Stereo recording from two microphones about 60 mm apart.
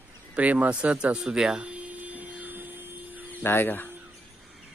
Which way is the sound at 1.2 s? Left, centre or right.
Centre.